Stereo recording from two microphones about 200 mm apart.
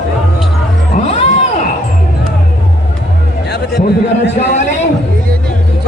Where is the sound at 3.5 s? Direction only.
55° left (ahead or behind).